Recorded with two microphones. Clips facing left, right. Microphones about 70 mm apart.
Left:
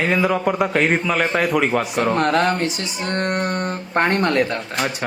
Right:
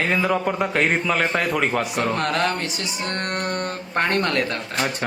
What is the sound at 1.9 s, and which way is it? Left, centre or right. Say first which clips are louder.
Speech: left 4 dB; centre.